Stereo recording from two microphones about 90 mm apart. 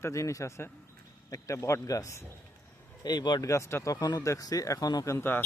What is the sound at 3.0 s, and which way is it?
Speech, 50° left (ahead or behind).